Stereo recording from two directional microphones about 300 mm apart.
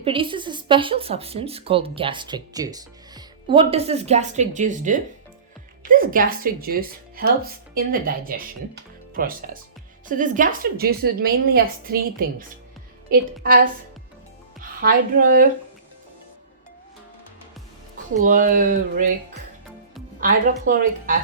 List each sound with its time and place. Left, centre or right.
0.0 s speech: centre
18.2 s speech: right